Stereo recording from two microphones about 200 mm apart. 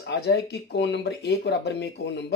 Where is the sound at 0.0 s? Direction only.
55° left (ahead or behind).